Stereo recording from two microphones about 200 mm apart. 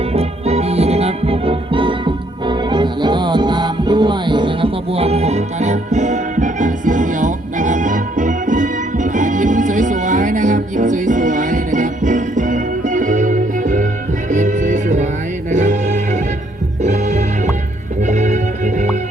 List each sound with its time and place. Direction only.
0.1 s music: 30° right (ahead or behind)